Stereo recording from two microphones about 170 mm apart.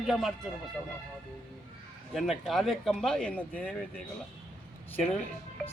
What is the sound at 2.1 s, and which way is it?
Speech, centre (ahead or behind).